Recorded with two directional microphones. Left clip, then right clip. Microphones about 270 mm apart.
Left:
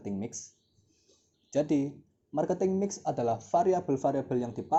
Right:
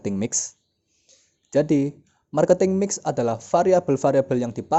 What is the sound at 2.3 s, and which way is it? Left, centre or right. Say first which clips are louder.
Speech: right 11 dB; right.